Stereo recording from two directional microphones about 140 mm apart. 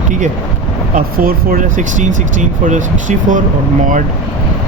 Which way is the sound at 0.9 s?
90° right.